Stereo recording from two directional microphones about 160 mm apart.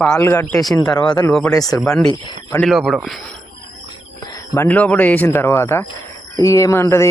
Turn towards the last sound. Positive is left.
turn(degrees=15)  # may be behind; listen again after turning